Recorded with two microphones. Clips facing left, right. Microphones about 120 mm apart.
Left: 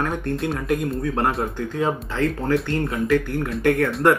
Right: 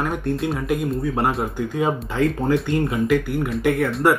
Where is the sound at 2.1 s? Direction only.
15° right (ahead or behind).